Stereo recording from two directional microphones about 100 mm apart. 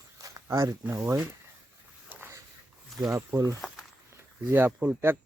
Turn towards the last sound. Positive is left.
turn(degrees=-20)  # may be behind; listen again after turning